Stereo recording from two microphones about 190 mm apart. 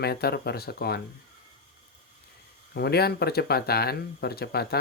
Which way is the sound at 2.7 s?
55° left (ahead or behind).